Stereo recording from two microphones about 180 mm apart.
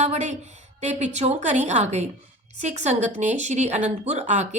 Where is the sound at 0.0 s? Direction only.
40° right (ahead or behind).